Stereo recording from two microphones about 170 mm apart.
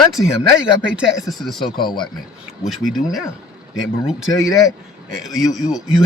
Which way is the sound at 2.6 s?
Centre (ahead or behind).